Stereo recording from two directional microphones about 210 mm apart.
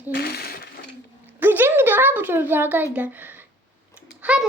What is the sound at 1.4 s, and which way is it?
A child's voice, 10° right (ahead or behind).